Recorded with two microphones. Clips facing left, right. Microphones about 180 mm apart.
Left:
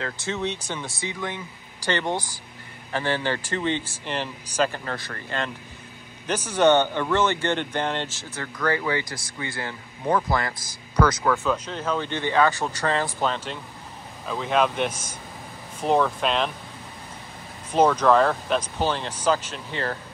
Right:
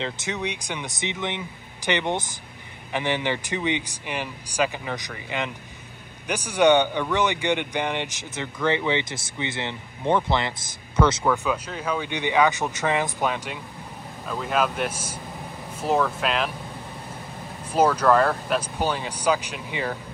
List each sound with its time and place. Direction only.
0.0 s speech: 15° right (ahead or behind)
11.2 s speech: 10° right (ahead or behind)
17.7 s speech: 5° right (ahead or behind)